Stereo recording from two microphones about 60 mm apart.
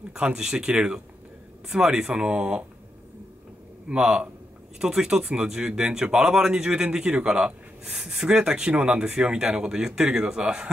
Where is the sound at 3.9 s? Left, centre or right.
Centre.